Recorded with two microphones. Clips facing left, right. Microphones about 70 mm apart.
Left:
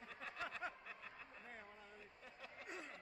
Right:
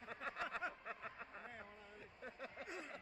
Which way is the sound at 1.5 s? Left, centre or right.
Centre.